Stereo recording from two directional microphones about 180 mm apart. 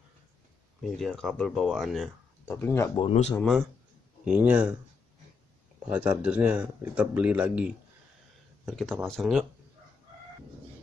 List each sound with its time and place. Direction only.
0.9 s speech: centre (ahead or behind)
2.4 s speech: 15° left (ahead or behind)
3.0 s speech: 35° left (ahead or behind)
4.2 s speech: 5° right (ahead or behind)
5.9 s speech: 10° right (ahead or behind)